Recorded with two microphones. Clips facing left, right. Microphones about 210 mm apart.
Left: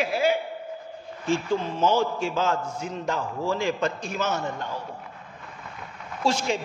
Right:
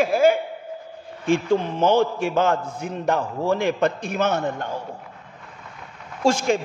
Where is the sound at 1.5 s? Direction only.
60° right (ahead or behind).